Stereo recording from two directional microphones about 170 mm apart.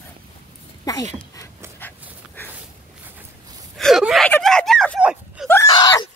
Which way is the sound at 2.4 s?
10° left (ahead or behind).